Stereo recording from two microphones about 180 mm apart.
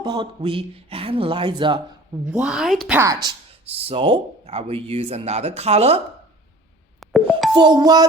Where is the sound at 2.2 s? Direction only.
5° right (ahead or behind).